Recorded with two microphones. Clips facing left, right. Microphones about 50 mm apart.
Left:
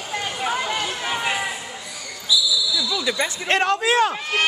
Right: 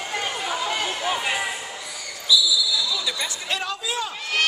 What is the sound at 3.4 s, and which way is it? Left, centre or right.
Speech, left.